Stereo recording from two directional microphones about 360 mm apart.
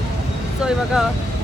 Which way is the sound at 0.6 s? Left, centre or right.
Centre.